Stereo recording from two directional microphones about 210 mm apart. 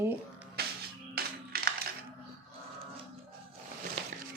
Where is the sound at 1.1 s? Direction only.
45° right (ahead or behind).